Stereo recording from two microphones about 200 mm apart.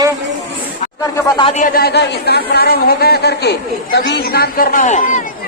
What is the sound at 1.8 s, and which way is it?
Speech, 55° left (ahead or behind).